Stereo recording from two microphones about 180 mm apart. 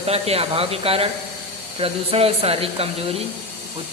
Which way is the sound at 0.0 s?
35° right (ahead or behind).